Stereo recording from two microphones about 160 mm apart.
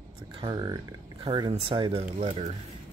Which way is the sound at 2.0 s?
45° right (ahead or behind).